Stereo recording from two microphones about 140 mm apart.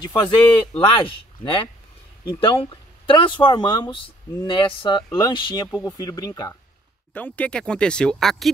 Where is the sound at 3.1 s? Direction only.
35° left (ahead or behind).